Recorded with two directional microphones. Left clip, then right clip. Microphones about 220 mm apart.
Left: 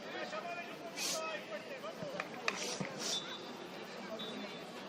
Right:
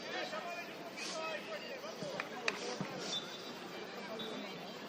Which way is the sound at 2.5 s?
Centre (ahead or behind).